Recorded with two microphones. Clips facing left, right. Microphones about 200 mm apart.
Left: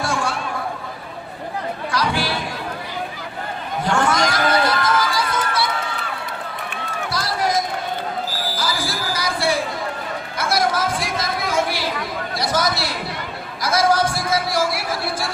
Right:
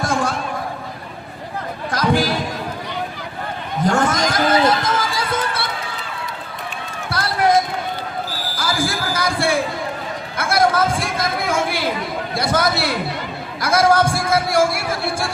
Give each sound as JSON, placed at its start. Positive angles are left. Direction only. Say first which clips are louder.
{"t": 0.0, "sound": "chatter", "louder": "right 3 dB", "side_deg": -40}
{"t": 1.9, "sound": "chatter", "louder": "right 5 dB", "side_deg": -45}
{"t": 3.8, "sound": "a sound", "louder": "right 1 dB", "side_deg": -40}
{"t": 4.8, "sound": "music", "louder": "left 1 dB", "side_deg": -55}
{"t": 7.1, "sound": "basketball bounce", "louder": "right 6 dB", "side_deg": -55}
{"t": 10.3, "sound": "a sound", "louder": "right 4 dB", "side_deg": -55}